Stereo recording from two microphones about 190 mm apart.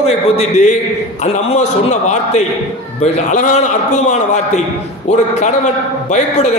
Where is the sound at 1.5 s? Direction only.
35° left (ahead or behind).